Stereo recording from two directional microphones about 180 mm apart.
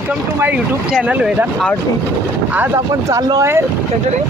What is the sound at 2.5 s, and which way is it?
Speech, 15° right (ahead or behind).